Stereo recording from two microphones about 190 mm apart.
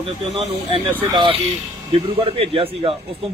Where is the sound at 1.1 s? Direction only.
25° right (ahead or behind).